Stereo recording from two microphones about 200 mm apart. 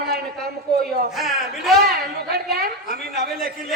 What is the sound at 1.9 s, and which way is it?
A woman's voice, 50° right (ahead or behind).